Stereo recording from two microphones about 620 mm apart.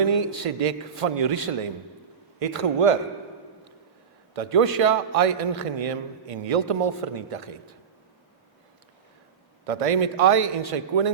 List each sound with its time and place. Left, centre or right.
0.1 s a man's voice: right
4.4 s a man's voice: right
9.6 s a man's voice: right